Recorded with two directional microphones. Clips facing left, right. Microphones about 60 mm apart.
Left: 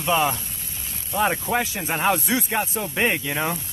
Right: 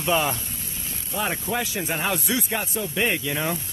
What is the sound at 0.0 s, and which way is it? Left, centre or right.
Speech, centre.